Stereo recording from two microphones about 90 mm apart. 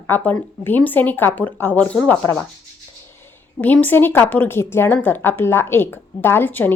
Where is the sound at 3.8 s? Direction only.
25° left (ahead or behind).